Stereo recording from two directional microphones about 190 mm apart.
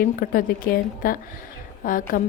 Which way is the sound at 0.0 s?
50° left (ahead or behind).